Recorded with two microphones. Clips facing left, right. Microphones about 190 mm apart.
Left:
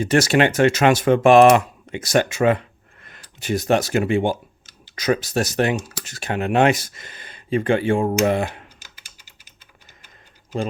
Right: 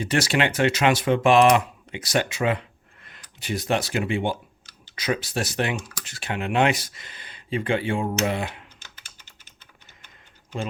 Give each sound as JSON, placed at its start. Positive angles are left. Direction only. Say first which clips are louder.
{"t": 0.0, "sound": "speech", "louder": "left 6 dB", "side_deg": 45}
{"t": 5.8, "sound": "speech", "louder": "left 4 dB", "side_deg": 25}
{"t": 6.1, "sound": "speech", "louder": "left 5 dB", "side_deg": 45}